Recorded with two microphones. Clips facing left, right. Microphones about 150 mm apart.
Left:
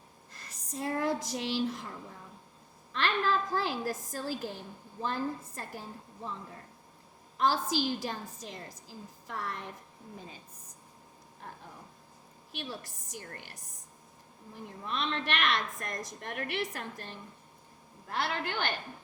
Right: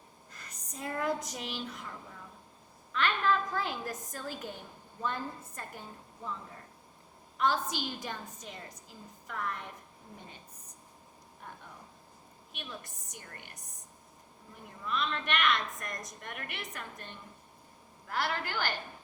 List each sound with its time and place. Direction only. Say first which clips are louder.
0.3 s speech: left 6 dB; 30° left (ahead or behind)
2.9 s a woman's voice: even; 30° left (ahead or behind)
7.3 s a woman's voice: left 2 dB; 30° left (ahead or behind)
12.5 s a woman's voice: left 4 dB; 35° left (ahead or behind)
14.8 s a woman's voice: even; 30° left (ahead or behind)